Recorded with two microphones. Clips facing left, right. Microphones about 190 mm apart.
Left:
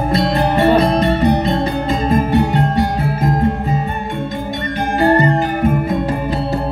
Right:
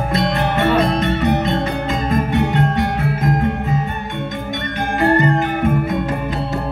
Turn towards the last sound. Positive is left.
turn(degrees=35)  # may be behind; listen again after turning